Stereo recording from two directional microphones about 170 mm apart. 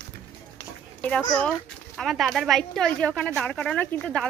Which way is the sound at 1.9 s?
Centre (ahead or behind).